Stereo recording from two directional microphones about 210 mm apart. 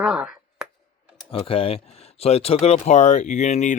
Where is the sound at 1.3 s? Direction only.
25° left (ahead or behind).